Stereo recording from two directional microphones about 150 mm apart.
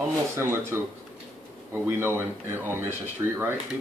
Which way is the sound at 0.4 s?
20° right (ahead or behind).